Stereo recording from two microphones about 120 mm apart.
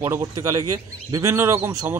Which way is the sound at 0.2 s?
30° right (ahead or behind).